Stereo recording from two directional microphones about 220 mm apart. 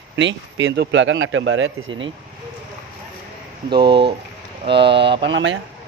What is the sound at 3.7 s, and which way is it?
Speech, 20° right (ahead or behind).